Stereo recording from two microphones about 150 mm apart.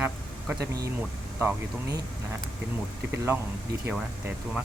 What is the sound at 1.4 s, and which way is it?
Speech, 15° right (ahead or behind).